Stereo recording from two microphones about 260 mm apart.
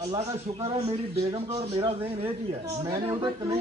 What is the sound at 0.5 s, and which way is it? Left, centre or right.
Speech, right.